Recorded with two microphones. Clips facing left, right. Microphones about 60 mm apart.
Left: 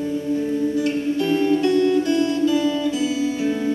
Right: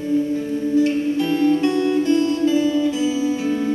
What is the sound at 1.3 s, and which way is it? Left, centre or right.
Music, left.